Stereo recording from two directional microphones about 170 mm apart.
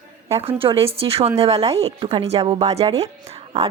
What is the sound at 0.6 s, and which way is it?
A woman's voice, 35° right (ahead or behind).